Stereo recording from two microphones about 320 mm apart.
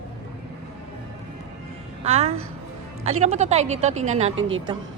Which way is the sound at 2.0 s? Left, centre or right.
Centre.